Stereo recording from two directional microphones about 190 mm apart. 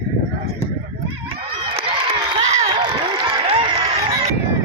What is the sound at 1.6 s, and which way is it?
Crowd, 25° right (ahead or behind).